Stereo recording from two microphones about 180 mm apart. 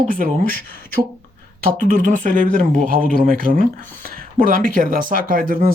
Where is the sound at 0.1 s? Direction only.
50° right (ahead or behind).